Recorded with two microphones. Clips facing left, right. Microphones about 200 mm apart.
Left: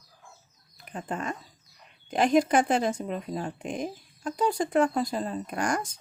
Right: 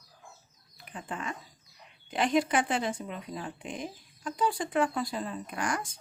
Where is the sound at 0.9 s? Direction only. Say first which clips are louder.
Left 5 dB; 40° left (ahead or behind).